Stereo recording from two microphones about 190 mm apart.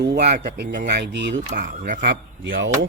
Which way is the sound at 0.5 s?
60° right (ahead or behind).